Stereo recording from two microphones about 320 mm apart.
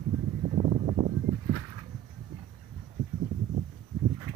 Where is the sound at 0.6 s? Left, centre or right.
Centre.